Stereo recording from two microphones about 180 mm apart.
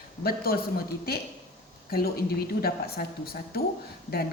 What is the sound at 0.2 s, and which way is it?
A woman's voice, 60° left (ahead or behind).